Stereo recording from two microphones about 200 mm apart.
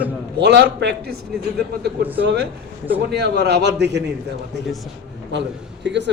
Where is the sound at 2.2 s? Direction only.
55° right (ahead or behind).